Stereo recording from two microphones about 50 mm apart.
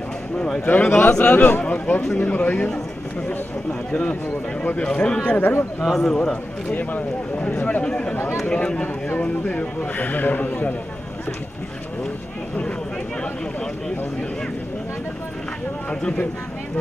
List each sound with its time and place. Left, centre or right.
0.7 s speech: left
3.9 s speech: left
5.4 s a man's voice: left
5.9 s a man's voice: centre
6.7 s speech: left
7.8 s a man's voice: centre
8.8 s speech: left
15.9 s speech: left